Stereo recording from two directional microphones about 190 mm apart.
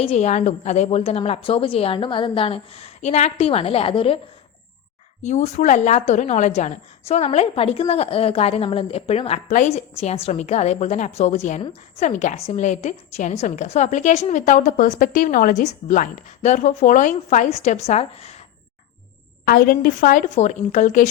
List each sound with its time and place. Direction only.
0.0 s a woman's voice: 35° left (ahead or behind)
5.2 s a woman's voice: 40° left (ahead or behind)
19.5 s a woman's voice: 50° left (ahead or behind)